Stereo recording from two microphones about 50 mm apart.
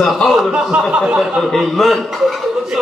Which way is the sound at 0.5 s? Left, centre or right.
Right.